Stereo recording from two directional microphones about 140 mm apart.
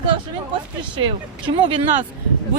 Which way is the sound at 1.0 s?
35° right (ahead or behind).